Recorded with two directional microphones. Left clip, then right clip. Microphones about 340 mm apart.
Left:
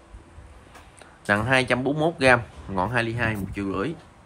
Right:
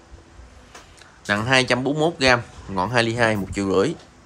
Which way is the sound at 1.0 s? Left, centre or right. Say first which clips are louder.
Even; centre.